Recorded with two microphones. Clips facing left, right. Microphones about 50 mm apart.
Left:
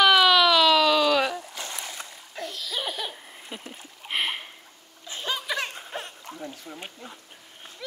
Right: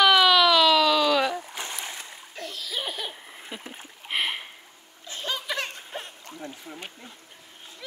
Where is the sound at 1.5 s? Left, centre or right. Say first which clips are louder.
Right 1 dB; right.